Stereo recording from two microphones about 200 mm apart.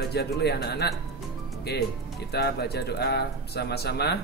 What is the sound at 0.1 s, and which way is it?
Speech, 55° left (ahead or behind).